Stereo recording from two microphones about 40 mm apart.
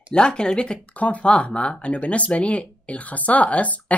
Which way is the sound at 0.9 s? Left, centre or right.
Left.